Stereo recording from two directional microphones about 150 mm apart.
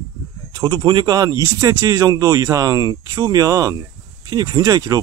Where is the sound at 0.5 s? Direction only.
30° right (ahead or behind).